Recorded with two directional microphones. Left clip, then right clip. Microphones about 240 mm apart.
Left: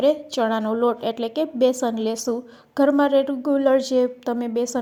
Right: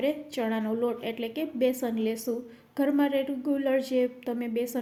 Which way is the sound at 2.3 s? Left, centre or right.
Left.